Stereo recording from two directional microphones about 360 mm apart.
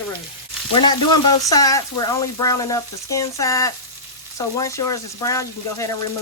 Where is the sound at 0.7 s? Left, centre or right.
Centre.